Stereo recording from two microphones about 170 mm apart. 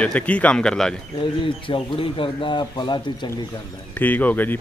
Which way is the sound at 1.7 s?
30° left (ahead or behind).